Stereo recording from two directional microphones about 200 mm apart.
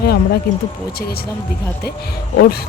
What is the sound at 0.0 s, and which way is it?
Speech, 50° left (ahead or behind).